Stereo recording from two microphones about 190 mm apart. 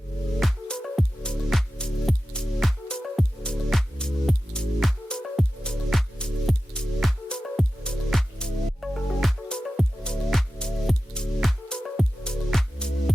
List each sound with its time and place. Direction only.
0.3 s music: centre (ahead or behind)